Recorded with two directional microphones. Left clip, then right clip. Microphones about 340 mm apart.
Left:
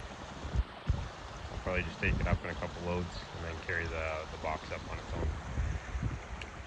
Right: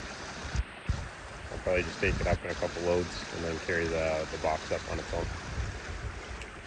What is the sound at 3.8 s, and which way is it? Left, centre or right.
Speech, left.